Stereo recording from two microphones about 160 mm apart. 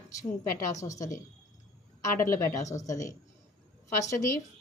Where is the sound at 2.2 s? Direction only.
20° left (ahead or behind).